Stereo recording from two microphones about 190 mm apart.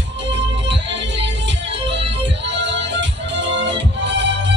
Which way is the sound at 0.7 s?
70° right (ahead or behind).